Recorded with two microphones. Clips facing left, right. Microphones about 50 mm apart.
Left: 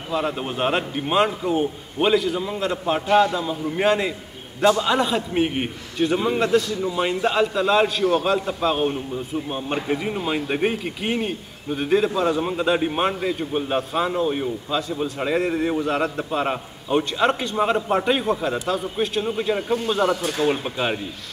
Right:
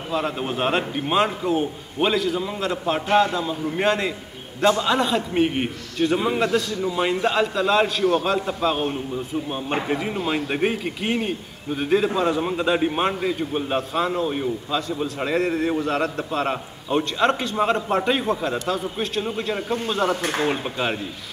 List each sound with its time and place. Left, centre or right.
0.1 s a man's voice: centre
20.2 s speech: right
20.6 s a man's voice: centre